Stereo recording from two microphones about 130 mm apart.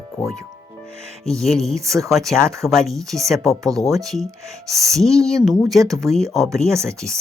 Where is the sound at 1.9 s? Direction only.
25° right (ahead or behind).